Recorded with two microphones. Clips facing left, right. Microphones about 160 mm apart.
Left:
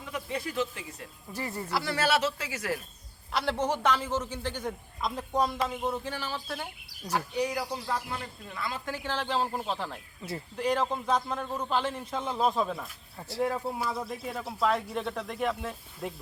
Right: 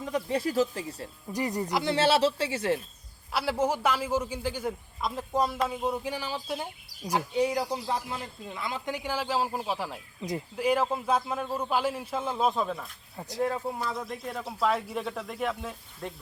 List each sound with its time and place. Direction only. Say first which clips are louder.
0.0 s speech: right 6 dB; 35° right (ahead or behind)
1.3 s speech: right 4 dB; 15° right (ahead or behind)
3.3 s a man's voice: right 2 dB; 5° right (ahead or behind)
13.1 s a man's voice: right 1 dB; 15° right (ahead or behind)
13.4 s a man's voice: even; 10° left (ahead or behind)